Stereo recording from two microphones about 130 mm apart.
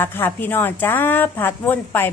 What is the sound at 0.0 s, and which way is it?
A woman's voice, 15° left (ahead or behind).